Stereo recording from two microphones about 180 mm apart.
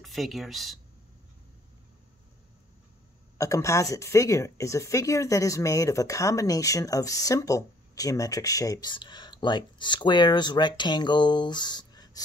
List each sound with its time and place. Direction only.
0.0 s speech: centre (ahead or behind)
3.3 s speech: 15° left (ahead or behind)